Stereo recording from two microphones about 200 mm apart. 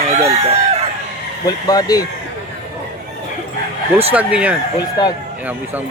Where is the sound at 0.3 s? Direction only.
30° right (ahead or behind).